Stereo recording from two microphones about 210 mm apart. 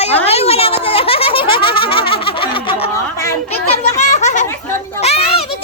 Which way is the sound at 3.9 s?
35° left (ahead or behind).